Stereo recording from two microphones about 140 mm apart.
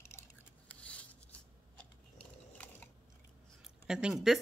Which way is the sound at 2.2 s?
10° left (ahead or behind).